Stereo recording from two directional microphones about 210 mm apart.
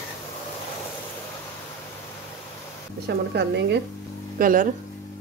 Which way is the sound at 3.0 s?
55° right (ahead or behind).